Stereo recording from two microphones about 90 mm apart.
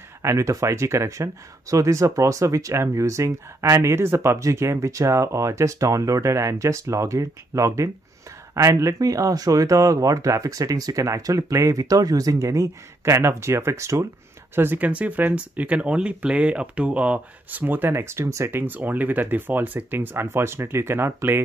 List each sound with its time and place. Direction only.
0.2 s speech: 35° right (ahead or behind)